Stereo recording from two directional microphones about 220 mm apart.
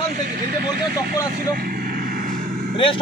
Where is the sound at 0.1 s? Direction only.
45° right (ahead or behind).